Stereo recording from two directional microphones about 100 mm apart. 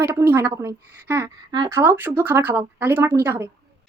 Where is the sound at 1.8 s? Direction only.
20° right (ahead or behind).